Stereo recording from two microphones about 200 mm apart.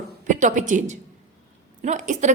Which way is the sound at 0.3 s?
40° right (ahead or behind).